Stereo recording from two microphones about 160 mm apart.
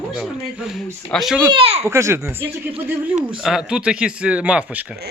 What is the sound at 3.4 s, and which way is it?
Speech, 5° right (ahead or behind).